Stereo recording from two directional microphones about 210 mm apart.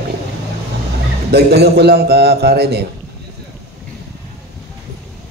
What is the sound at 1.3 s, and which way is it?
A man's voice, 50° right (ahead or behind).